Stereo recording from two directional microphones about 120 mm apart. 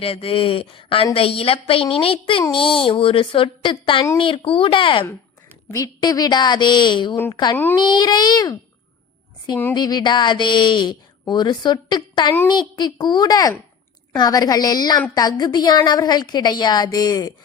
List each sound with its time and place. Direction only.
0.0 s speech: 50° left (ahead or behind)
5.7 s speech: 30° left (ahead or behind)
7.5 s speech: 15° left (ahead or behind)
7.8 s speech: 40° left (ahead or behind)
9.7 s speech: 35° left (ahead or behind)